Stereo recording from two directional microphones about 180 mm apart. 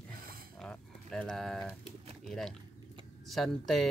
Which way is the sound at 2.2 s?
5° left (ahead or behind).